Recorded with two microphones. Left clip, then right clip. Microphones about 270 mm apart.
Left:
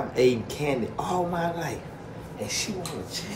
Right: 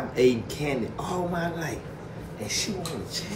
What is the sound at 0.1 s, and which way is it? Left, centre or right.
Speech, centre.